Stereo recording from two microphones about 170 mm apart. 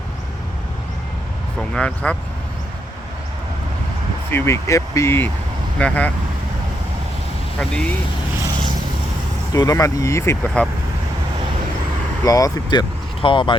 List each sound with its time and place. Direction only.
1.5 s speech: 5° left (ahead or behind)
4.3 s speech: 15° left (ahead or behind)
7.6 s speech: 5° left (ahead or behind)
9.5 s speech: 20° left (ahead or behind)
12.2 s speech: 20° left (ahead or behind)